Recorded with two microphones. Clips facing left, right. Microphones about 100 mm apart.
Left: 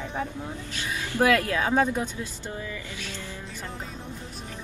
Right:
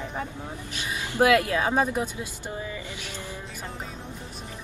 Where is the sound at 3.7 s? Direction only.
Centre (ahead or behind).